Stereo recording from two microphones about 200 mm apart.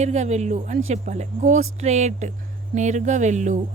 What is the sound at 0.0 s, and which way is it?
Speech, 35° right (ahead or behind).